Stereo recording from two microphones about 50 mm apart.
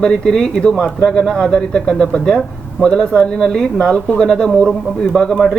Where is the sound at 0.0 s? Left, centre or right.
Centre.